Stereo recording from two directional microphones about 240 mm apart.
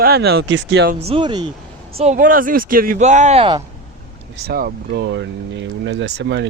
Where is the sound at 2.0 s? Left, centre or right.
Right.